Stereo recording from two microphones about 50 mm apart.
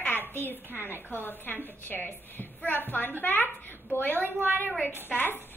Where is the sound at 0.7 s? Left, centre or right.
Right.